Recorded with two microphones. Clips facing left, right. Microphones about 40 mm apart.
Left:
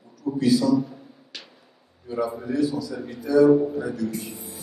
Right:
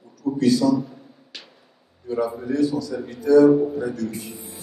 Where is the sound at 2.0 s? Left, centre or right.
Centre.